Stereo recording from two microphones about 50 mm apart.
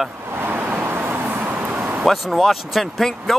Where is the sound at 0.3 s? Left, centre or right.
Right.